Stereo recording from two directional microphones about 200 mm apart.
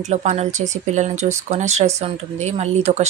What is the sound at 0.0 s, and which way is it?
Speech, 35° right (ahead or behind).